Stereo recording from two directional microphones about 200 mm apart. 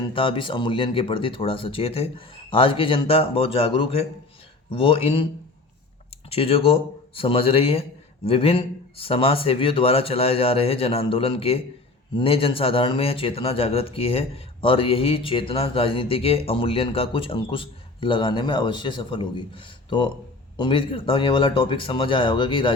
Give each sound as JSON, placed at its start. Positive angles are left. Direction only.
{"t": 0.0, "sound": "speech", "side_deg": 25}
{"t": 6.3, "sound": "speech", "side_deg": 30}